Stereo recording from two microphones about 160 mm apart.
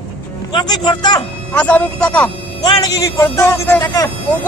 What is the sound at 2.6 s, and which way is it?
Speech, 20° left (ahead or behind).